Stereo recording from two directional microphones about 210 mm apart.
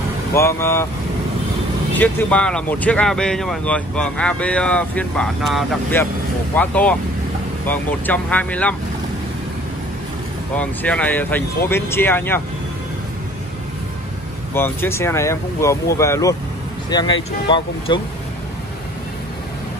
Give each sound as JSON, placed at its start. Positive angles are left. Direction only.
{"t": 0.3, "sound": "speech", "side_deg": 15}
{"t": 2.0, "sound": "speech", "side_deg": 5}
{"t": 10.5, "sound": "speech", "side_deg": 5}
{"t": 14.5, "sound": "speech", "side_deg": 10}